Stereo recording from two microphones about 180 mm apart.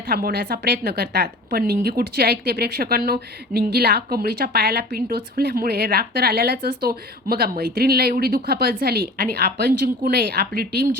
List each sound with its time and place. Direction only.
0.1 s a woman's voice: 55° right (ahead or behind)